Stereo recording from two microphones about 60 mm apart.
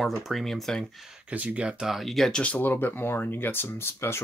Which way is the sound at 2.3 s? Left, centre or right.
Centre.